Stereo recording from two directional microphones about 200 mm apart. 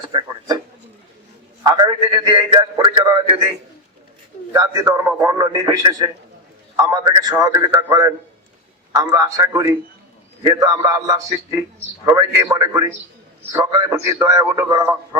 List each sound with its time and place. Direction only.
0.0 s a man's voice: 25° right (ahead or behind)
1.6 s a man's voice: 20° right (ahead or behind)
4.5 s a man's voice: 15° right (ahead or behind)